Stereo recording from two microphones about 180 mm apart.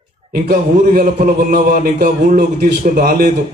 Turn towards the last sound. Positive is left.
turn(degrees=-55)  # may be behind; listen again after turning